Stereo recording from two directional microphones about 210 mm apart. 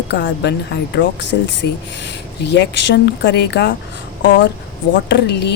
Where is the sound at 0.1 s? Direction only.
55° left (ahead or behind).